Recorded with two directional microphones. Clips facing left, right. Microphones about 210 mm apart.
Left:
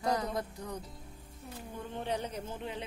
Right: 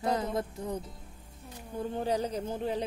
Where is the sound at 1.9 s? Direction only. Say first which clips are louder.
Right 5 dB; 35° right (ahead or behind).